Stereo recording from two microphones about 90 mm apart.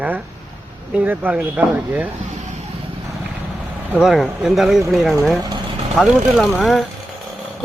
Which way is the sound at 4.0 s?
5° right (ahead or behind).